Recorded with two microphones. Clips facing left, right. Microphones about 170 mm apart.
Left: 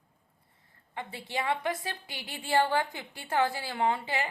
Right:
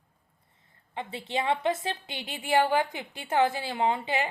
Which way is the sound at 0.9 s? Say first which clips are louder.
Right 3 dB; 20° right (ahead or behind).